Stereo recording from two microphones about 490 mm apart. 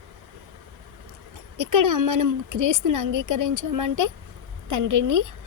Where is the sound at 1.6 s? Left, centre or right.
Right.